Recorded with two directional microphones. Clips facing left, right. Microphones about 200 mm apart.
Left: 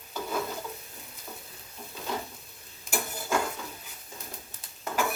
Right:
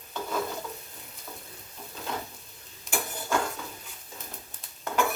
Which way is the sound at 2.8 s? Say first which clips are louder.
Even; 5° left (ahead or behind).